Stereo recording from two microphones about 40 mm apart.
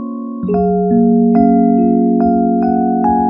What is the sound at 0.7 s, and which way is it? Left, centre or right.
Music, centre.